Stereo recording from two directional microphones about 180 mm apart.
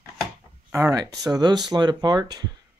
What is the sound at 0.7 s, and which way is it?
Speech, 15° right (ahead or behind).